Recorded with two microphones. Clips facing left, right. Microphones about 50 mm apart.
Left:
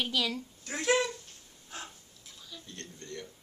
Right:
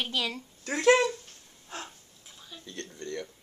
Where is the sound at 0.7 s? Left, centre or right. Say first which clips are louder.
Right 8 dB; right.